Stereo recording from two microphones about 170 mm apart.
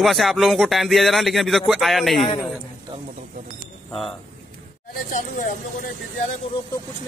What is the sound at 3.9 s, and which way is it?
Speech, centre (ahead or behind).